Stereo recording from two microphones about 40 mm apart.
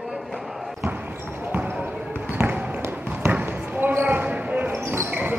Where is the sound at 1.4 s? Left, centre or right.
Right.